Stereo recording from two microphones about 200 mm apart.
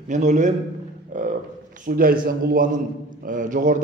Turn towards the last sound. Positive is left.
turn(degrees=-40)  # may be behind; listen again after turning